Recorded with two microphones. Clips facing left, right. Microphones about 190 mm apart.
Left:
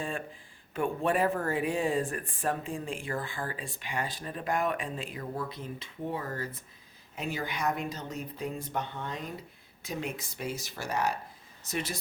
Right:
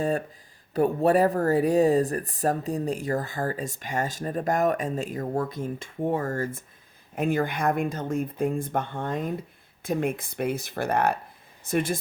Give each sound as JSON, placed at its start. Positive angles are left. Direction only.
{"t": 0.7, "sound": "speech", "side_deg": -40}